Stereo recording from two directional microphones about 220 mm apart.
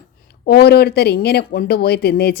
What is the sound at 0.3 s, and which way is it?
Speech, 45° left (ahead or behind).